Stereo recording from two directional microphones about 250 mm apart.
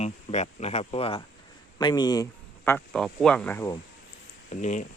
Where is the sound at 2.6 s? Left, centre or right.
Centre.